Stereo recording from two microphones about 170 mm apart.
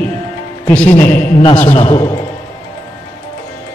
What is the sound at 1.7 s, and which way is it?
Speech, 35° left (ahead or behind).